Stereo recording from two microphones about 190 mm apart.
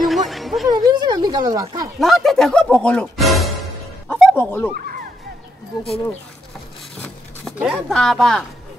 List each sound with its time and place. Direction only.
0.0 s a sound: centre (ahead or behind)
0.7 s speech: 20° right (ahead or behind)
2.0 s speech: centre (ahead or behind)
4.1 s music: centre (ahead or behind)
4.4 s speech: 10° left (ahead or behind)
4.7 s music: 50° right (ahead or behind)
7.5 s speech: 5° right (ahead or behind)